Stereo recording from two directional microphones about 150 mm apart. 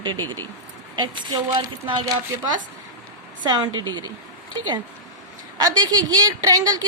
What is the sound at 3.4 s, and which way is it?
Speech, 30° right (ahead or behind).